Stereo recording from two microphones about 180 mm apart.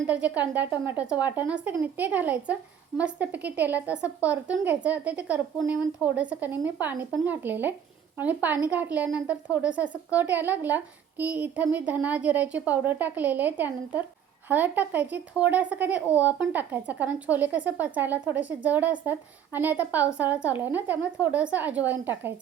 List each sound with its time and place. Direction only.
0.1 s speech: 10° right (ahead or behind)